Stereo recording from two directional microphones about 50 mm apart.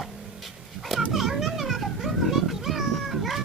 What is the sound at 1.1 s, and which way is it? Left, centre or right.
Children playing, centre.